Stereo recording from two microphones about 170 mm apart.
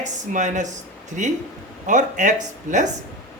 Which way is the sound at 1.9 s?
45° right (ahead or behind).